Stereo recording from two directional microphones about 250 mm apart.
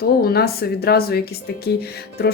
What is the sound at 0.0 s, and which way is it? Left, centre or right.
Speech, left.